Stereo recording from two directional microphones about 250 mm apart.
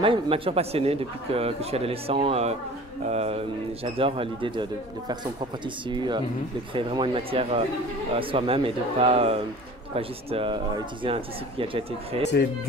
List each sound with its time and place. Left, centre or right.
0.0 s speech: right